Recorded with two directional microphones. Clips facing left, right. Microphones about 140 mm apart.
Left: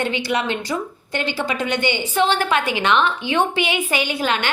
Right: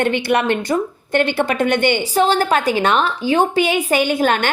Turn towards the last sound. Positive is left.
turn(degrees=-50)  # may be behind; listen again after turning